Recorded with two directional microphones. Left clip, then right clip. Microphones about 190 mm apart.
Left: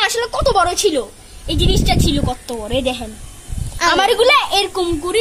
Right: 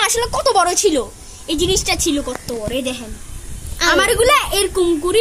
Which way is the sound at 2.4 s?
40° left (ahead or behind).